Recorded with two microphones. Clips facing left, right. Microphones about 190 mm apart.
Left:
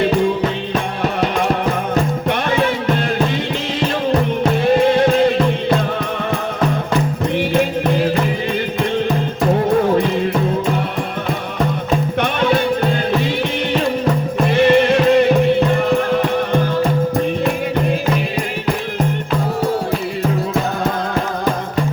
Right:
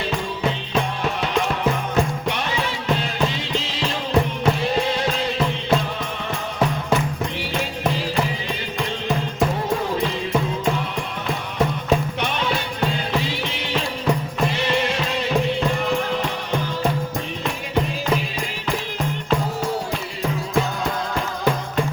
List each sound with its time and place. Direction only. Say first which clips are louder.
2.2 s music: left 8 dB; 55° left (ahead or behind)
4.9 s music: left 10 dB; 55° left (ahead or behind)
7.3 s music: left 10 dB; 55° left (ahead or behind)
12.2 s music: left 8 dB; 55° left (ahead or behind)
14.5 s music: left 15 dB; 55° left (ahead or behind)